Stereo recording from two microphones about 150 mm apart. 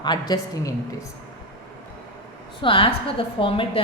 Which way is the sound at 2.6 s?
35° left (ahead or behind).